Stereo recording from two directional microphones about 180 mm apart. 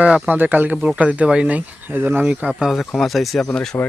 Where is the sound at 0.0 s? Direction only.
5° right (ahead or behind).